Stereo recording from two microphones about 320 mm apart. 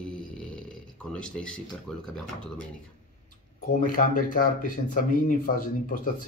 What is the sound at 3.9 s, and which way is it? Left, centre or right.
Speech, left.